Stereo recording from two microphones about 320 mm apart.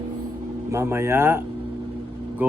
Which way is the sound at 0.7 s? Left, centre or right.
Centre.